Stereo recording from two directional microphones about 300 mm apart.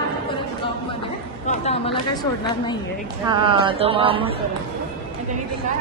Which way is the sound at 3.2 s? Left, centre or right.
Centre.